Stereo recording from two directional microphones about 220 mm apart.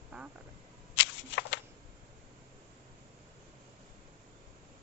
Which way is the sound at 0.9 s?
55° left (ahead or behind).